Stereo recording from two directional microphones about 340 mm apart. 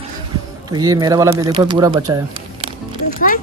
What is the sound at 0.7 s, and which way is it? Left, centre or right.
Speech, centre.